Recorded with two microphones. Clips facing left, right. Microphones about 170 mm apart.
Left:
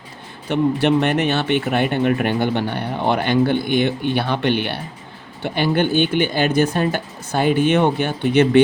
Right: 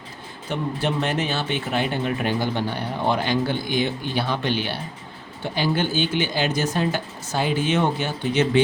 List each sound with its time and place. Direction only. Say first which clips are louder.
0.4 s speech: left 8 dB; 65° left (ahead or behind)